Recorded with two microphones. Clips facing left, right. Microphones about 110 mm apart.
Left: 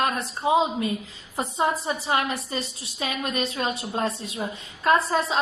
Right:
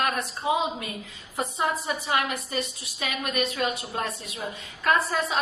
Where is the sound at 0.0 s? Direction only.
25° left (ahead or behind).